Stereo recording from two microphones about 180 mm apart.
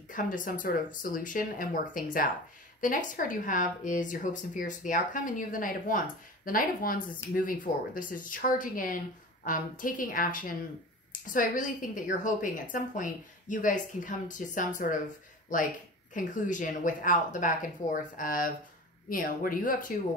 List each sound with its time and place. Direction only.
0.1 s speech: 45° left (ahead or behind)